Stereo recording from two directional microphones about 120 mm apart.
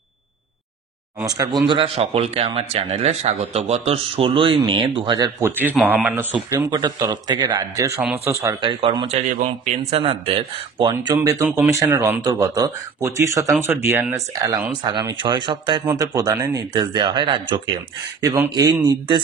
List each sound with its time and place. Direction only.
1.2 s speech: 30° right (ahead or behind)
2.0 s speech: 60° right (ahead or behind); by 5.3 s 40° right (ahead or behind)
5.4 s speech: 15° right (ahead or behind)
7.0 s speech: 35° right (ahead or behind)
8.5 s speech: 40° right (ahead or behind)
9.1 s a man's voice: 80° right
9.8 s speech: 50° right (ahead or behind)
11.2 s speech: 25° right (ahead or behind)
12.2 s speech: 30° right (ahead or behind)
15.1 s speech: 40° right (ahead or behind)
15.8 s speech: 25° right (ahead or behind); by 17.6 s 45° right (ahead or behind)
18.2 s speech: 25° right (ahead or behind)